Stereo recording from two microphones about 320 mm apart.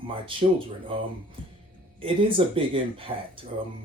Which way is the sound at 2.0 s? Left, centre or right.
Centre.